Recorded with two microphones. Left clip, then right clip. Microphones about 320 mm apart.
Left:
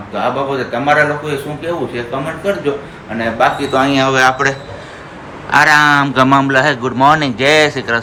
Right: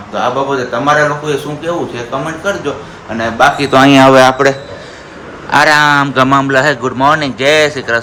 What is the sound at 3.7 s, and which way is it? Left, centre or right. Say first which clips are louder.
A man's voice: right 7 dB; right.